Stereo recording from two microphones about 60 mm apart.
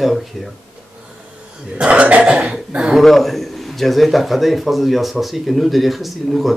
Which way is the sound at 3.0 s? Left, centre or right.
Centre.